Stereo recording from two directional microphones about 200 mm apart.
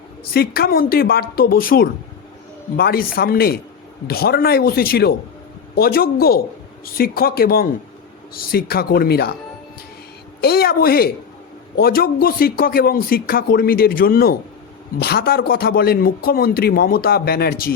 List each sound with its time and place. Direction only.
0.3 s a man's voice: 50° left (ahead or behind)
10.4 s a man's voice: 50° left (ahead or behind)